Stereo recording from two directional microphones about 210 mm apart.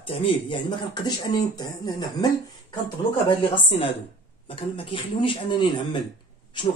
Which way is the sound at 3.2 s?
25° left (ahead or behind).